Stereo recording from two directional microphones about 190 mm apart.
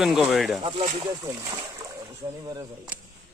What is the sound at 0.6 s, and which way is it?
Speech, 30° right (ahead or behind).